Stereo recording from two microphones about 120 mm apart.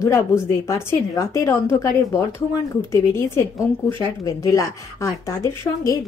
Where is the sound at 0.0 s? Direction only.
25° left (ahead or behind).